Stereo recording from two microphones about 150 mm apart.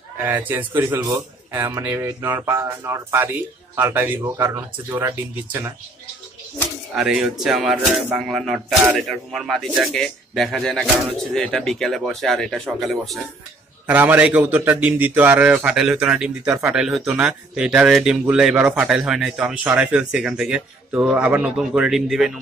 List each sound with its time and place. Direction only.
0.2 s a man's voice: 10° right (ahead or behind)
7.0 s a man's voice: 5° right (ahead or behind)
13.8 s a man's voice: 10° right (ahead or behind)